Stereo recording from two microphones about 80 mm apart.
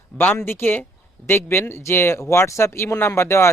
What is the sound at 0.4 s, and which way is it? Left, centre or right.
Speech, left.